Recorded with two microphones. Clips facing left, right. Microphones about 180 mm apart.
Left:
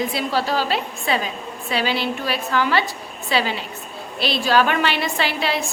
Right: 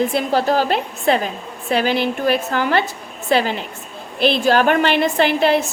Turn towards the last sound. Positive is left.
turn(degrees=-50)  # may be behind; listen again after turning